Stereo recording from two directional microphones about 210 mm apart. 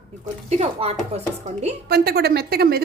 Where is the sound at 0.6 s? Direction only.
30° right (ahead or behind).